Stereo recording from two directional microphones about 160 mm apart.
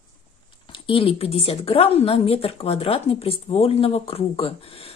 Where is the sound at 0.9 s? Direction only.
35° left (ahead or behind).